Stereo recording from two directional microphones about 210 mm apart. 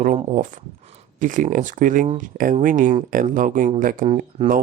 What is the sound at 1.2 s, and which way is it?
Speech, 40° right (ahead or behind).